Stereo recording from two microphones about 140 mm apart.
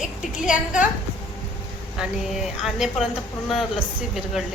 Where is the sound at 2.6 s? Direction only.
Centre (ahead or behind).